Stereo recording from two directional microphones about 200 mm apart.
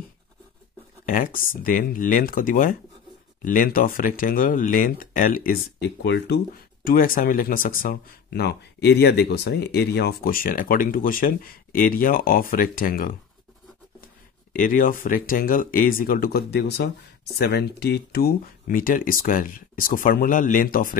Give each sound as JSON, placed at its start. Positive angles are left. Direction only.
{"t": 1.0, "sound": "speech", "side_deg": 45}
{"t": 6.0, "sound": "speech", "side_deg": 60}